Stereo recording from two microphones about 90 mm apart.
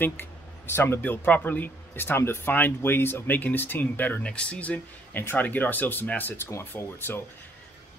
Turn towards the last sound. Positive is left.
turn(degrees=25)  # may be behind; listen again after turning